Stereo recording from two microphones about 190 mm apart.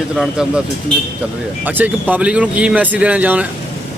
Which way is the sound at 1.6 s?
10° right (ahead or behind).